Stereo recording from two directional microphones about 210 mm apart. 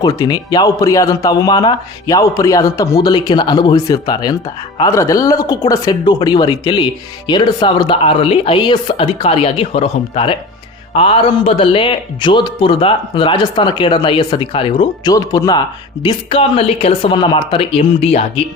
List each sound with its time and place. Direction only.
0.0 s a man's voice: 20° left (ahead or behind)